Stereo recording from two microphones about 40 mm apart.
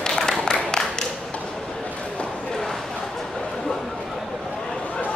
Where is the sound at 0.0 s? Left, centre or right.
Centre.